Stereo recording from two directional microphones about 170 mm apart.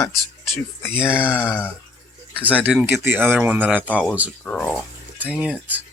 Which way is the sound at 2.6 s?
5° right (ahead or behind).